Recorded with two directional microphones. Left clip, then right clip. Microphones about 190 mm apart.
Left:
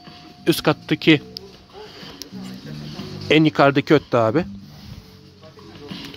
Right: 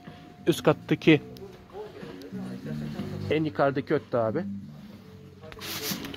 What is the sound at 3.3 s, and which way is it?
Speech, 30° left (ahead or behind).